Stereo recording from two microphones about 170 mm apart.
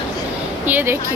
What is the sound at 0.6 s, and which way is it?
Speech, 10° right (ahead or behind).